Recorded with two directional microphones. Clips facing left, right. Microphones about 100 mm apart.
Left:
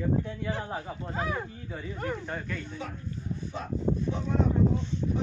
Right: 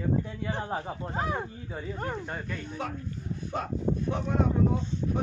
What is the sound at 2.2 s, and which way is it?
Speech, 10° right (ahead or behind).